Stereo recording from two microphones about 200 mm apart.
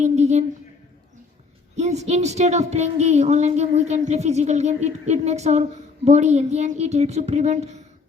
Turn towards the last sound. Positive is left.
turn(degrees=-35)  # may be behind; listen again after turning